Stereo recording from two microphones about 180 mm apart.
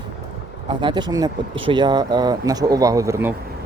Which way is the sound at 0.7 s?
25° right (ahead or behind).